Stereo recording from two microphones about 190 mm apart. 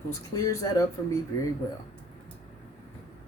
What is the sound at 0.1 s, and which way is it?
Speech, 15° left (ahead or behind).